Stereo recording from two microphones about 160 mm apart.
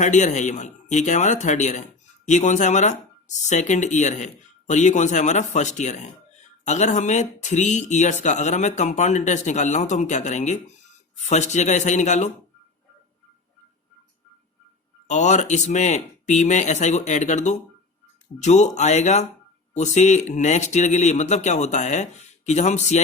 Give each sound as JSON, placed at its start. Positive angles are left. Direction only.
{"t": 0.0, "sound": "speech", "side_deg": 50}
{"t": 15.0, "sound": "speech", "side_deg": 50}